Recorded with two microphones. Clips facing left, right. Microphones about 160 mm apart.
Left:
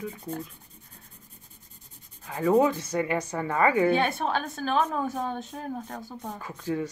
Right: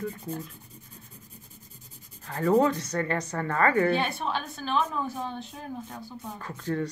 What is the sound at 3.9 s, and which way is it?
A woman's voice, 45° left (ahead or behind).